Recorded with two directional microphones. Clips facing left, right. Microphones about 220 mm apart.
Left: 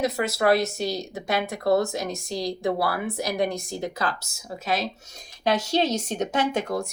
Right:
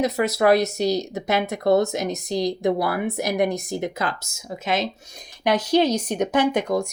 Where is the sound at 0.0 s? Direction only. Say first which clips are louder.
Right 4 dB; 20° right (ahead or behind).